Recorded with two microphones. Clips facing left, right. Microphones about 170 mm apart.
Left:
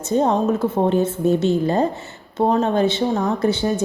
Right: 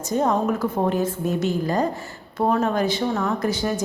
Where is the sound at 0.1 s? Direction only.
25° left (ahead or behind).